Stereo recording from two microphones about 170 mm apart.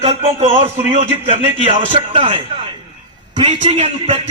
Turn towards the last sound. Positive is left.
turn(degrees=-40)  # may be behind; listen again after turning